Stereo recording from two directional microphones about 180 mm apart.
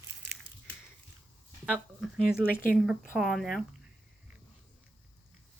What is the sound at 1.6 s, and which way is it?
Speech, 5° right (ahead or behind).